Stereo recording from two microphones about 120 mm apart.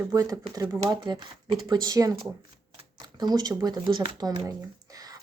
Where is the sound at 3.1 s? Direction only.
35° right (ahead or behind).